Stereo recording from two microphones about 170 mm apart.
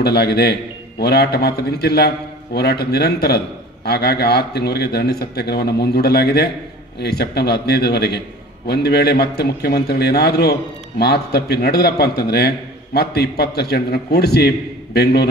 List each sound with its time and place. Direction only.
0.0 s a man's voice: 70° left (ahead or behind)